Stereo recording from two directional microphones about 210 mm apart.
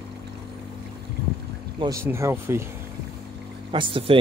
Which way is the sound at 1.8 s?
15° right (ahead or behind).